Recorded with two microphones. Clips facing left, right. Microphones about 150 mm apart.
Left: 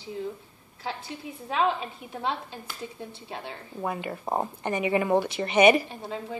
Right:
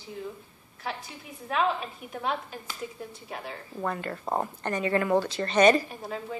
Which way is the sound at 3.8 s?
10° left (ahead or behind).